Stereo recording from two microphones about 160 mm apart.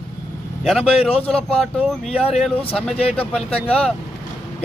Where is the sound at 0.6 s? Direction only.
Centre (ahead or behind).